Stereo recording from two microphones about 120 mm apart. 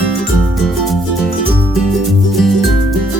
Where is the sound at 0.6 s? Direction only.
Centre (ahead or behind).